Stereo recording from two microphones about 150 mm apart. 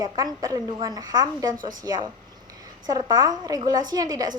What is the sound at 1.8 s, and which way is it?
A woman's voice, 25° right (ahead or behind).